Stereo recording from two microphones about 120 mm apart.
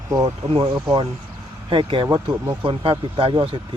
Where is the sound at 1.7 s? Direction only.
45° right (ahead or behind).